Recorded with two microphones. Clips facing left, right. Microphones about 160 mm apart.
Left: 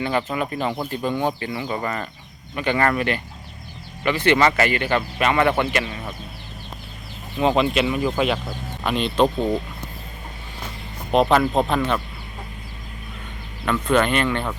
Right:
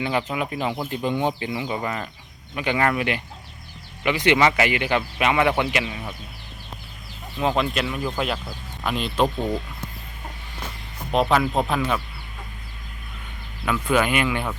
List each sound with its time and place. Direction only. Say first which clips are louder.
0.0 s speech: left 1 dB; 10° right (ahead or behind)
7.3 s speech: left 4 dB; centre (ahead or behind)
11.1 s speech: left 3 dB; centre (ahead or behind)
13.7 s speech: left 2 dB; 5° right (ahead or behind)